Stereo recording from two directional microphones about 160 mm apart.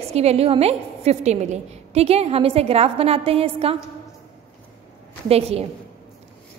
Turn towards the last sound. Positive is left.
turn(degrees=-40)  # may be behind; listen again after turning